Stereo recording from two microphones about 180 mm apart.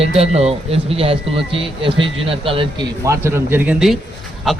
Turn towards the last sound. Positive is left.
turn(degrees=0)  # may be behind; listen again after turning